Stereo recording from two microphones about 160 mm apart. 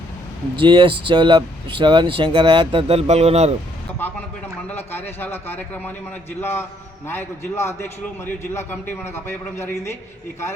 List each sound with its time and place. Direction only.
0.5 s speech: 30° right (ahead or behind)
4.9 s a man's voice: 15° left (ahead or behind)